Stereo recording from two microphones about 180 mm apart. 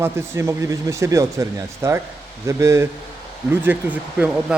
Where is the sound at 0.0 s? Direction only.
15° right (ahead or behind).